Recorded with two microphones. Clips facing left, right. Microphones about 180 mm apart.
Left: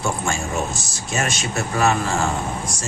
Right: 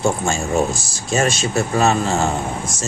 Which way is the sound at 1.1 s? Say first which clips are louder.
Right 6 dB; 30° right (ahead or behind).